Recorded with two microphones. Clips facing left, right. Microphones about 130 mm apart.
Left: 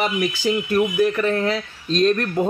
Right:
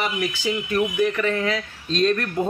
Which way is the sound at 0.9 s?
35° left (ahead or behind).